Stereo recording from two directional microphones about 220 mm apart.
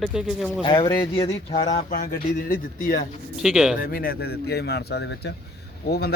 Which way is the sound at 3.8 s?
40° left (ahead or behind).